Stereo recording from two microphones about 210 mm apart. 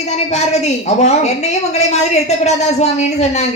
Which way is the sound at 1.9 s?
30° left (ahead or behind).